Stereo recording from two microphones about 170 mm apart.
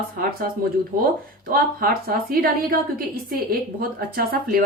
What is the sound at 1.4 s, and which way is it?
Speech, 60° right (ahead or behind).